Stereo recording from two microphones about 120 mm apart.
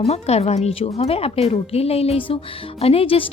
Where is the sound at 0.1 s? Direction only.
60° left (ahead or behind).